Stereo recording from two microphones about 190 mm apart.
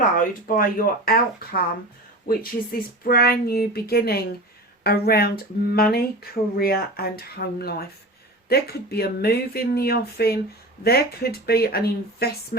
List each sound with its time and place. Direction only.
0.2 s speech: 45° left (ahead or behind)